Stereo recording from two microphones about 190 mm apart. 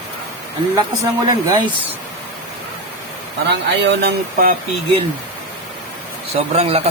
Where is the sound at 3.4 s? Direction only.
65° right (ahead or behind).